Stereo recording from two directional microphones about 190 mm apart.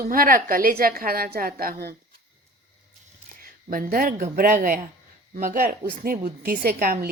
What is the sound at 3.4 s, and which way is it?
A woman's voice, 50° right (ahead or behind).